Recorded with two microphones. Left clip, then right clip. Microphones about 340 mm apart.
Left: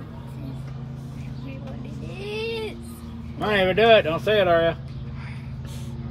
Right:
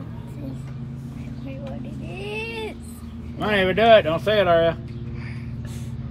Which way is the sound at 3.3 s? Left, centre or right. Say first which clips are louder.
Even; centre.